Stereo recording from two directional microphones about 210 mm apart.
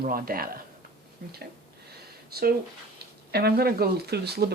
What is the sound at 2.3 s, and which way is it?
Speech, 45° right (ahead or behind).